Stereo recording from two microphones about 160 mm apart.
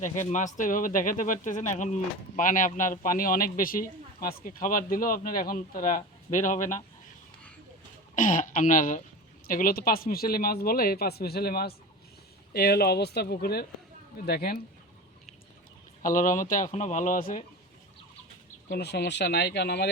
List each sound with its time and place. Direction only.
0.0 s speech: 50° left (ahead or behind)
8.1 s speech: 55° left (ahead or behind); by 14.6 s 70° left (ahead or behind)
16.0 s speech: 55° left (ahead or behind)
18.7 s speech: 90° left